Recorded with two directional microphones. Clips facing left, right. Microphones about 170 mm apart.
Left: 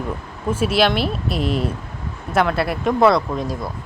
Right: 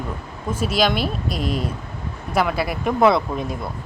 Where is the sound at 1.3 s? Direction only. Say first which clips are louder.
Left 5 dB; 40° right (ahead or behind).